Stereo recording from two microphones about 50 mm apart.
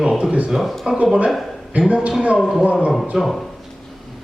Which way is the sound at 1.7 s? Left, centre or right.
Right.